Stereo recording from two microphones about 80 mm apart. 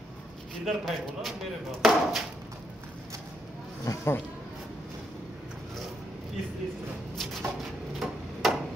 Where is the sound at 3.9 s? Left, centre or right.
Left.